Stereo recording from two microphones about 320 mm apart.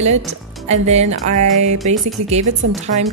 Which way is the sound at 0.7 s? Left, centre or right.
Right.